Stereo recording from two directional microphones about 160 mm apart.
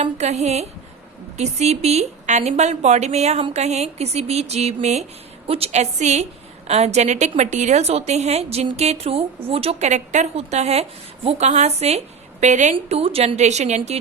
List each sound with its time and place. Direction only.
0.0 s a woman's voice: 45° right (ahead or behind)
12.7 s a woman's voice: 35° right (ahead or behind)